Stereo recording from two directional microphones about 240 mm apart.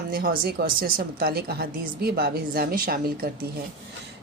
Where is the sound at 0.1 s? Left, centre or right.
Right.